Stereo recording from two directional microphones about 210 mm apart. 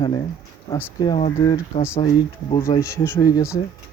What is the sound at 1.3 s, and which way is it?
Speech, 15° left (ahead or behind).